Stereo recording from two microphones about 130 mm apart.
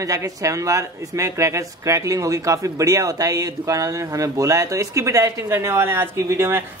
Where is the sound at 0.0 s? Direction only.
25° right (ahead or behind).